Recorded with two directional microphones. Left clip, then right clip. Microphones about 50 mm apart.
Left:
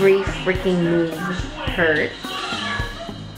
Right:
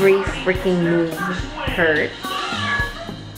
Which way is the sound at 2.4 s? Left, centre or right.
Right.